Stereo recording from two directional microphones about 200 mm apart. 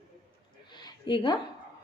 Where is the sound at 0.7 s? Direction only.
25° left (ahead or behind).